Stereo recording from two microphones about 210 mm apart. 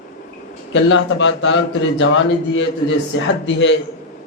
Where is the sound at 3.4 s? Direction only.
60° left (ahead or behind).